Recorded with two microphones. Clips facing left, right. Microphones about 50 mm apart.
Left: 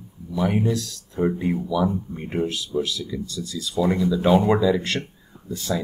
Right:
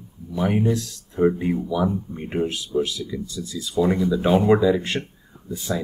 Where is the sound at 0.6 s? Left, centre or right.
Right.